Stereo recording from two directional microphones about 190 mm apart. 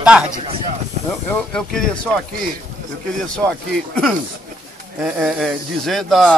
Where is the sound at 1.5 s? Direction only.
5° left (ahead or behind).